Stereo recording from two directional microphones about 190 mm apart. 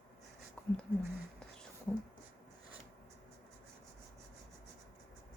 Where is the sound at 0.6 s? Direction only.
5° left (ahead or behind).